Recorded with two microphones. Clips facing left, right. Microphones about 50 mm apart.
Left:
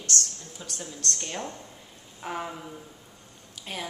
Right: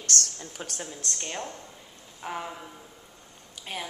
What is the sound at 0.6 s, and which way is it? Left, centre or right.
Speech, right.